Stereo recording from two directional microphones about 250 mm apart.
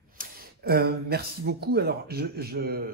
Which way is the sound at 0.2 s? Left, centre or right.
Right.